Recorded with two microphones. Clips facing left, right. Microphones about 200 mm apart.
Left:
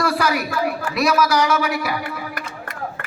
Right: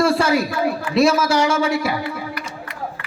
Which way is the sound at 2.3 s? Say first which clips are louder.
Even; 50° left (ahead or behind).